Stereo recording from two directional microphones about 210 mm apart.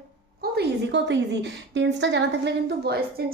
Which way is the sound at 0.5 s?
55° right (ahead or behind).